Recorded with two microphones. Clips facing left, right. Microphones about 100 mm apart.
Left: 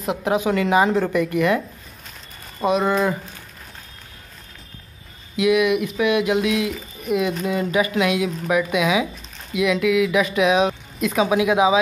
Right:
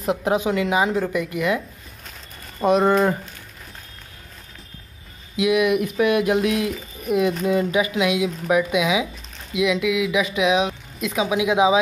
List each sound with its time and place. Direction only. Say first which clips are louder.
0.1 s speech: even; 30° right (ahead or behind)
0.5 s speech: left 3 dB; 10° right (ahead or behind)
2.7 s speech: right 3 dB; 35° right (ahead or behind)
5.3 s speech: left 2 dB; 20° right (ahead or behind)
5.6 s speech: even; 40° right (ahead or behind)
7.4 s speech: right 1 dB; 25° right (ahead or behind)